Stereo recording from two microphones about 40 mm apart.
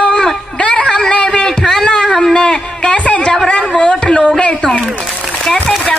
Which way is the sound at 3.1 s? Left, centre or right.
Left.